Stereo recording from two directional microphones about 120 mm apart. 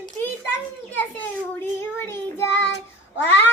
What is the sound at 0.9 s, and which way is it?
Child singing, 15° left (ahead or behind).